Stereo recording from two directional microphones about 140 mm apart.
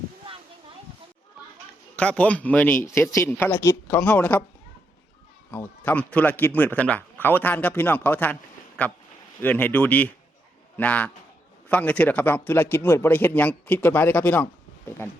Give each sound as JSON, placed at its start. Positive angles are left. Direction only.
{"t": 2.0, "sound": "speech", "side_deg": 10}
{"t": 5.5, "sound": "speech", "side_deg": 15}